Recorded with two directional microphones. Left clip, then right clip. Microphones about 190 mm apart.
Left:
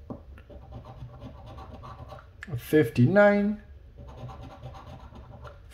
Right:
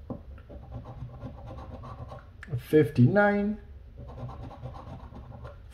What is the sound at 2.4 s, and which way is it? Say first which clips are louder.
Speech: even; 30° left (ahead or behind).